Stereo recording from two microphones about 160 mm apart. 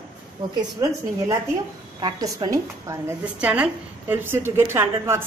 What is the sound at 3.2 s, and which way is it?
A woman's voice, 10° right (ahead or behind).